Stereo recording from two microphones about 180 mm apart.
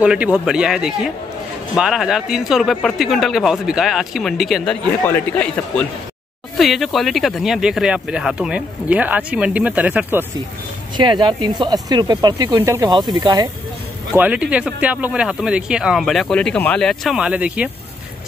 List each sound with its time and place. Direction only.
0.0 s speech: 5° right (ahead or behind)
5.0 s a man's voice: 10° left (ahead or behind); by 10.2 s 10° right (ahead or behind)
11.0 s speech: 25° right (ahead or behind)
14.1 s speech: 10° right (ahead or behind)